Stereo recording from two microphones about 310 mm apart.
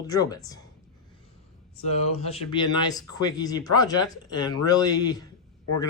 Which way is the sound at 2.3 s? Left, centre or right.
Centre.